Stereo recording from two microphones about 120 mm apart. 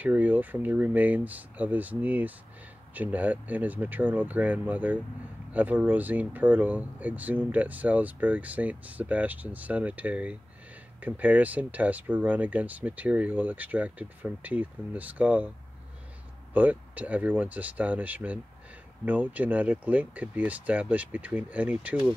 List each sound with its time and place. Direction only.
0.0 s speech: 15° right (ahead or behind)
16.5 s speech: 15° right (ahead or behind)